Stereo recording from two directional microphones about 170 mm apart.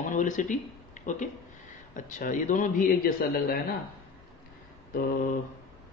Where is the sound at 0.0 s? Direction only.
50° left (ahead or behind).